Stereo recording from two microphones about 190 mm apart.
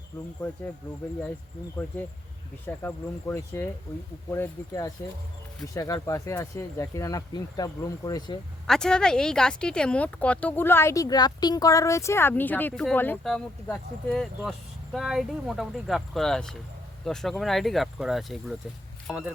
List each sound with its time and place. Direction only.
0.4 s speech: 5° left (ahead or behind)
2.6 s speech: 10° left (ahead or behind)
8.6 s speech: 5° left (ahead or behind)